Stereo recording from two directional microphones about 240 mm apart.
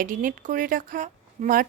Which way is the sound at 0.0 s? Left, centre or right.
Right.